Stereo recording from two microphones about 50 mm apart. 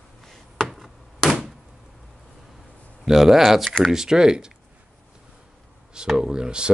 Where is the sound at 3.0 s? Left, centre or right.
Centre.